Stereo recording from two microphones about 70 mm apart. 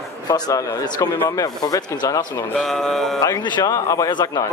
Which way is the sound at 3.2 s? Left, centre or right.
Left.